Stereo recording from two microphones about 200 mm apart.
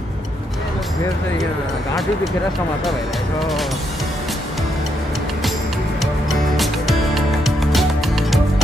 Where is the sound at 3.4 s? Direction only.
Centre (ahead or behind).